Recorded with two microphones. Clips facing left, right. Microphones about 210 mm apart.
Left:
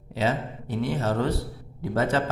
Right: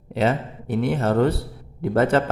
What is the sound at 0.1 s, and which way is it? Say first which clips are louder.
A man's voice: right 4 dB; 55° right (ahead or behind).